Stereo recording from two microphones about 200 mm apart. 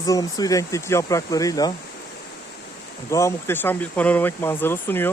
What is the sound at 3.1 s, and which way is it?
Speech, 15° left (ahead or behind).